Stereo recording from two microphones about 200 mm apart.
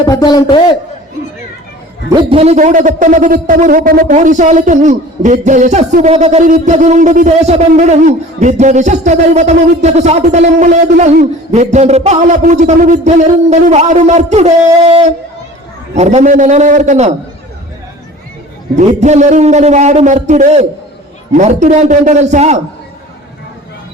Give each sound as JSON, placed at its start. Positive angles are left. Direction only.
{"t": 0.1, "sound": "a man's voice", "side_deg": 20}
{"t": 2.3, "sound": "a man's voice", "side_deg": -30}
{"t": 16.0, "sound": "a man's voice", "side_deg": -35}
{"t": 18.8, "sound": "a man's voice", "side_deg": -35}